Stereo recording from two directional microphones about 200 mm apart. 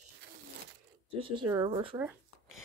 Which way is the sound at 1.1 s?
25° right (ahead or behind).